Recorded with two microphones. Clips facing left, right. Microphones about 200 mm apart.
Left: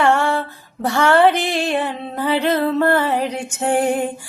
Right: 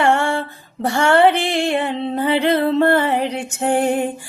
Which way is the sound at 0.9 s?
55° right (ahead or behind).